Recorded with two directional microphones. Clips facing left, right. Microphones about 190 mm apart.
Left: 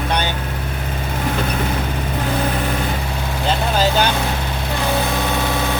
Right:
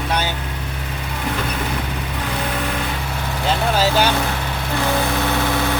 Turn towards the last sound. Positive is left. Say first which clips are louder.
# even
turn(degrees=-10)  # may be behind; listen again after turning